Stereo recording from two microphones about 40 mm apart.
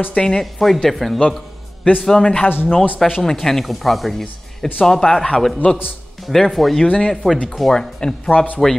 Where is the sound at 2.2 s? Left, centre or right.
Left.